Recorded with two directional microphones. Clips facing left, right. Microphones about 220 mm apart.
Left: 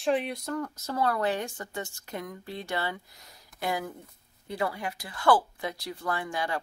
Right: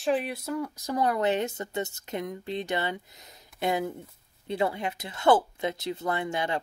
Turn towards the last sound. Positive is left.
turn(degrees=-20)  # may be behind; listen again after turning